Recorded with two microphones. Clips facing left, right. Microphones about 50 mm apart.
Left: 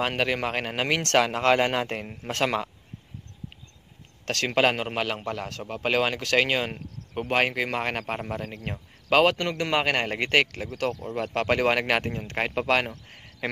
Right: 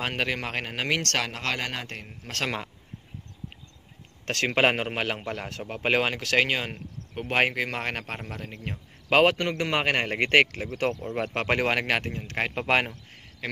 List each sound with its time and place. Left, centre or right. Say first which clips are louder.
0.0 s speech: left 3 dB; centre
1.0 s speech: left 7 dB; centre
2.4 s speech: left 5 dB; centre
4.3 s speech: even; centre
7.3 s speech: even; centre
7.6 s speech: left 3 dB; centre
9.1 s speech: even; centre
10.8 s speech: right 1 dB; right
11.1 s speech: left 3 dB; centre
11.6 s speech: left 2 dB; centre
13.4 s a man's voice: left 3 dB; centre